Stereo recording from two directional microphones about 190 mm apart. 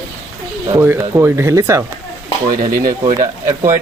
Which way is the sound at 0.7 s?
15° right (ahead or behind).